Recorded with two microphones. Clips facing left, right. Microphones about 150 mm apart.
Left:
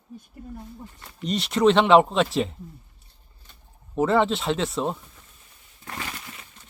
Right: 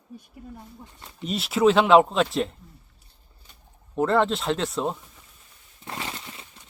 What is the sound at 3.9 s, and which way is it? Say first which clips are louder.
Speech: left 1 dB; centre (ahead or behind).